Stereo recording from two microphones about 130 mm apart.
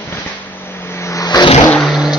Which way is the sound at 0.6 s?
20° left (ahead or behind).